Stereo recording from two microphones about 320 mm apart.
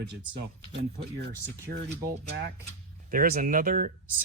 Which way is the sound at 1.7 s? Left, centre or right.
Right.